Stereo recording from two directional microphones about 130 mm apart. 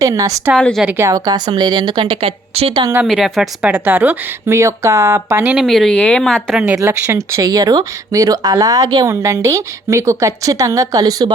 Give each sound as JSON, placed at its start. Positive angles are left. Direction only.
{"t": 0.0, "sound": "speech", "side_deg": -25}
{"t": 0.5, "sound": "speech", "side_deg": 0}
{"t": 0.9, "sound": "a woman's voice", "side_deg": -20}
{"t": 3.1, "sound": "a woman's voice", "side_deg": 0}
{"t": 5.4, "sound": "a woman's voice", "side_deg": -5}
{"t": 5.6, "sound": "speech", "side_deg": 5}
{"t": 6.7, "sound": "speech", "side_deg": -20}